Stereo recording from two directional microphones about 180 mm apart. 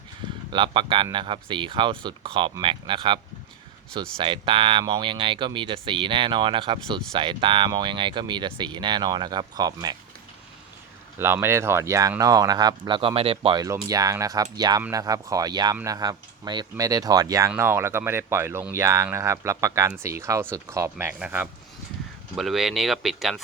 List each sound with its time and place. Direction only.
0.5 s speech: 25° right (ahead or behind)
4.2 s speech: 30° right (ahead or behind)
11.2 s speech: 15° right (ahead or behind)